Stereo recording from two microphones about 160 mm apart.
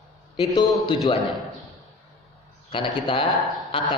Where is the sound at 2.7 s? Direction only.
30° left (ahead or behind).